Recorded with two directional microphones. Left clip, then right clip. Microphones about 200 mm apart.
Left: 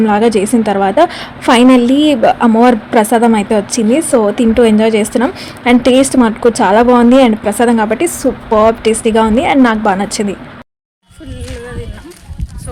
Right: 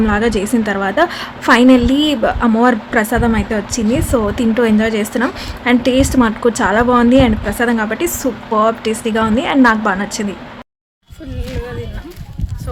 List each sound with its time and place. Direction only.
0.0 s a woman's voice: 15° left (ahead or behind)